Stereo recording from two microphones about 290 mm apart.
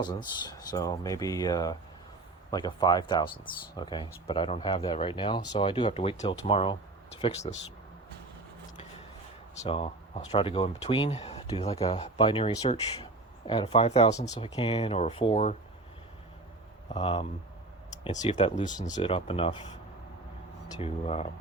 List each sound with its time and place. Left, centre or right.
0.0 s speech: centre
9.6 s speech: centre
16.9 s speech: centre
20.7 s speech: left